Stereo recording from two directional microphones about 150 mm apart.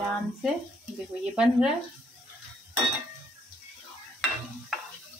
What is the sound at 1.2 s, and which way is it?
Speech, 5° right (ahead or behind).